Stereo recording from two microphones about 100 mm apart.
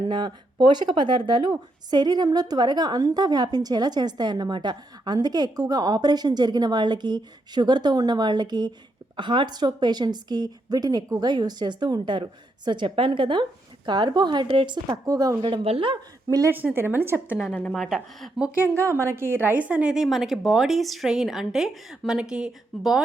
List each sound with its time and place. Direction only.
0.1 s a woman's voice: 50° right (ahead or behind)
15.0 s a woman's voice: 35° right (ahead or behind)
15.4 s a woman's voice: 65° right (ahead or behind)
16.7 s a woman's voice: 20° right (ahead or behind)
17.5 s a woman's voice: 10° left (ahead or behind)
17.7 s a woman's voice: 5° right (ahead or behind)
18.8 s a woman's voice: 30° right (ahead or behind); by 23.0 s 5° right (ahead or behind)